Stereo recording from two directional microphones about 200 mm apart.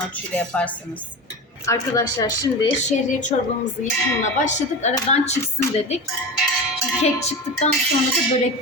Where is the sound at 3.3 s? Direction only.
35° left (ahead or behind).